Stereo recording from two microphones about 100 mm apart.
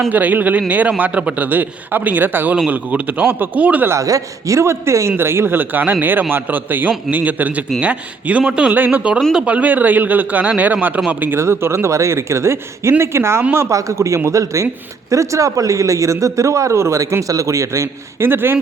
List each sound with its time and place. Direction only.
0.1 s a man's voice: 15° right (ahead or behind)
3.9 s a man's voice: 35° right (ahead or behind)